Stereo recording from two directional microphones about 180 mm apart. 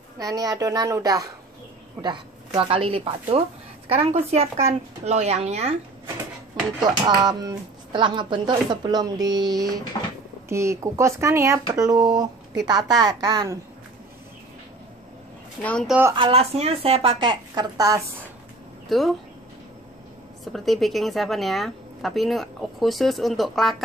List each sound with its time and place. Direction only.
0.2 s speech: 20° right (ahead or behind); by 5.8 s 35° right (ahead or behind)
6.8 s speech: 25° right (ahead or behind)
15.6 s a woman's voice: 5° left (ahead or behind)
15.9 s speech: 10° right (ahead or behind)
16.2 s speech: 35° right (ahead or behind)
18.9 s speech: centre (ahead or behind)
20.5 s a woman's voice: centre (ahead or behind)